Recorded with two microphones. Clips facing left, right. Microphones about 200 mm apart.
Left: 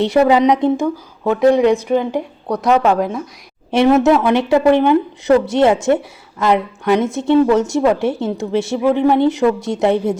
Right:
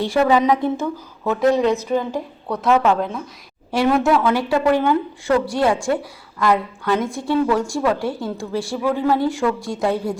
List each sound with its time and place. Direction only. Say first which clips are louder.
0.0 s a woman's voice: left 4 dB; 20° left (ahead or behind)